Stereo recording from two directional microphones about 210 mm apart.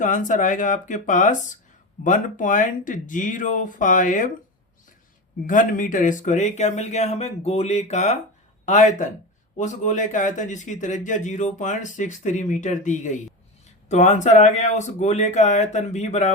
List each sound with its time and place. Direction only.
0.0 s speech: 35° left (ahead or behind)
5.5 s speech: 40° left (ahead or behind)